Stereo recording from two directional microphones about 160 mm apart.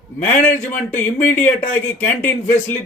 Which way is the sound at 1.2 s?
50° left (ahead or behind).